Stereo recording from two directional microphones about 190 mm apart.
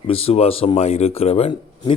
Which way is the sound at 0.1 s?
30° left (ahead or behind).